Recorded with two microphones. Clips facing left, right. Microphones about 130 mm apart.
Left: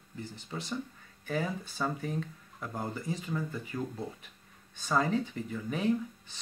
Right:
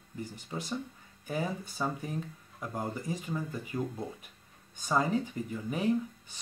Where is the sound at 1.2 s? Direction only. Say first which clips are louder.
Left 1 dB; 10° right (ahead or behind).